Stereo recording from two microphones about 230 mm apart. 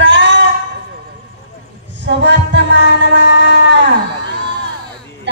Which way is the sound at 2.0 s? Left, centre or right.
Right.